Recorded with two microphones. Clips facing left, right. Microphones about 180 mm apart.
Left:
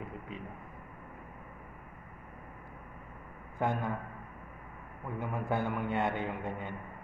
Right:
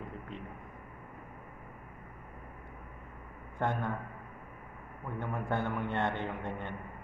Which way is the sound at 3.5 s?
5° left (ahead or behind).